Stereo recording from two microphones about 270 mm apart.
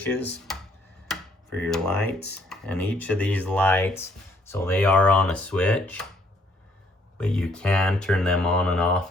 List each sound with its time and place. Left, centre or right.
1.1 s a sound: centre
2.0 s speech: left
2.5 s speech: centre
7.2 s speech: centre